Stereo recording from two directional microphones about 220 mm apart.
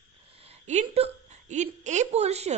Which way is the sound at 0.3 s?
30° right (ahead or behind).